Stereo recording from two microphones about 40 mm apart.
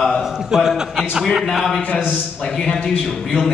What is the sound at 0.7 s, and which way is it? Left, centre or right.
Speech, centre.